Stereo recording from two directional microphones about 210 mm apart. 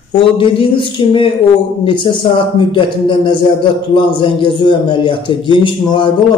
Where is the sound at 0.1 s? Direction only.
25° left (ahead or behind).